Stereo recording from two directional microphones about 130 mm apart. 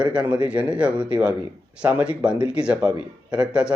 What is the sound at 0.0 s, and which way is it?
Speech, 10° right (ahead or behind).